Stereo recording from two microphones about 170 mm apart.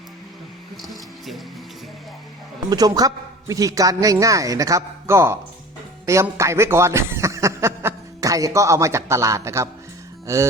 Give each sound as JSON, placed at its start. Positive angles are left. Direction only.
{"t": 2.6, "sound": "a man's voice", "side_deg": -25}
{"t": 10.2, "sound": "music", "side_deg": -20}